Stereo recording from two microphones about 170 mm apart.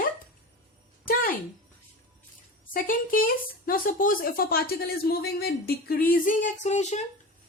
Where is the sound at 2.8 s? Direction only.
55° left (ahead or behind).